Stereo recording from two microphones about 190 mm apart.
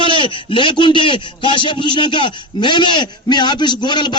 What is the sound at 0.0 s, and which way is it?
A man's voice, 25° left (ahead or behind).